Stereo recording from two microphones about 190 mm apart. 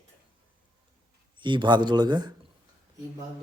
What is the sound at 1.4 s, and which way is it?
Speech, 25° right (ahead or behind).